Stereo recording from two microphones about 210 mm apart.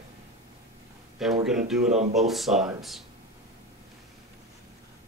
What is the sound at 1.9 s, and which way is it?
Speech, 35° right (ahead or behind).